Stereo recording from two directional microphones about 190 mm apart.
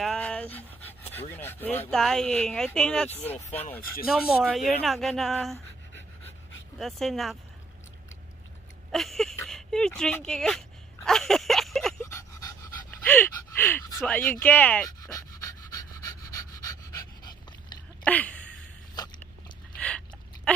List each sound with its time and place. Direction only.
0.0 s speech: 5° left (ahead or behind)
4.1 s speech: centre (ahead or behind)
8.9 s speech: centre (ahead or behind)
11.1 s a sound: centre (ahead or behind)
12.0 s pant: 15° left (ahead or behind)
14.9 s pant: 20° left (ahead or behind)
18.0 s a sound: 5° left (ahead or behind)